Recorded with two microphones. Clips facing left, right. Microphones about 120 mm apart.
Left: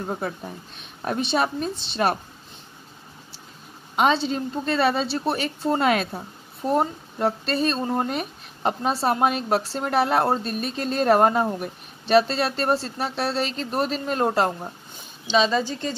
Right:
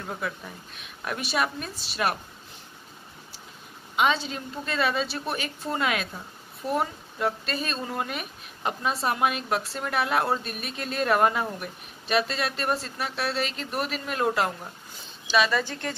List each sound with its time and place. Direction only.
0.0 s a woman's voice: 35° left (ahead or behind)
3.9 s a woman's voice: 35° left (ahead or behind)
15.3 s speech: 20° left (ahead or behind)